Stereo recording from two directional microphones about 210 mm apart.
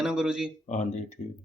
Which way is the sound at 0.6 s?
35° left (ahead or behind).